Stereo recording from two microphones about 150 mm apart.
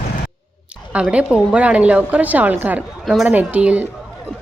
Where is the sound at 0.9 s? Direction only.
5° right (ahead or behind).